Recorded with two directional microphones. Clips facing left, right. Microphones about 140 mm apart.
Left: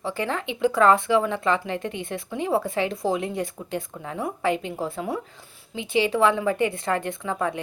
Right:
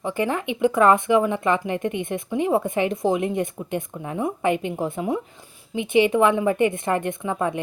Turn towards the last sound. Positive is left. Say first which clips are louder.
# right 2 dB
turn(degrees=-20)  # may be behind; listen again after turning